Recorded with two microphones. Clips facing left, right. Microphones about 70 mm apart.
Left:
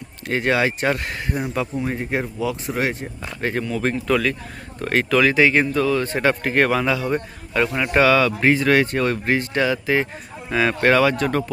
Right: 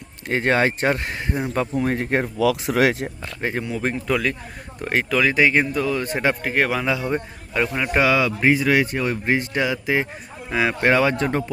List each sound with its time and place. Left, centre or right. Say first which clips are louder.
0.3 s speech: right 1 dB; right
1.7 s speech: right 3 dB; right
2.4 s speech: right 8 dB; right
3.4 s speech: left 2 dB; centre
6.1 s speech: left 1 dB; centre
6.8 s speech: left 1 dB; right
7.5 s speech: left 2 dB; centre
10.9 s speech: left 1 dB; right